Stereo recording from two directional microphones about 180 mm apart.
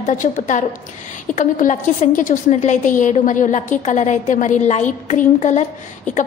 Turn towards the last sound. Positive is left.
turn(degrees=40)  # may be behind; listen again after turning